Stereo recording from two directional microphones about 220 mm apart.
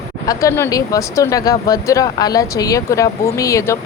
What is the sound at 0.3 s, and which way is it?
Speech, 15° left (ahead or behind).